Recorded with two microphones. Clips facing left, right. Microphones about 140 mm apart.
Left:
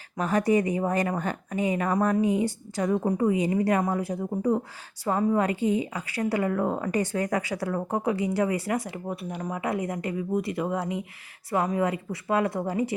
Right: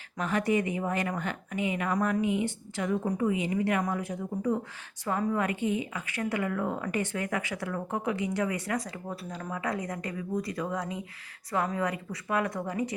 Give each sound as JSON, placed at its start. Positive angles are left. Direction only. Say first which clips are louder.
{"t": 0.2, "sound": "a woman's voice", "louder": "left 4 dB", "side_deg": 40}